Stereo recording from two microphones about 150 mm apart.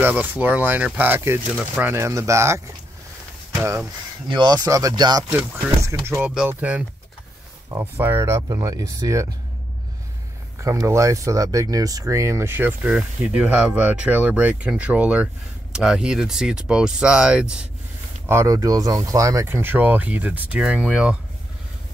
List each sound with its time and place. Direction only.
0.0 s speech: 10° right (ahead or behind)
4.3 s speech: 30° right (ahead or behind)
5.3 s speech: 15° right (ahead or behind)
10.6 s speech: 20° right (ahead or behind)
18.3 s speech: 20° right (ahead or behind)